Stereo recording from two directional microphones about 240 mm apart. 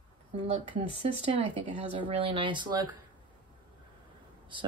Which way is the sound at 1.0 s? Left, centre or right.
Right.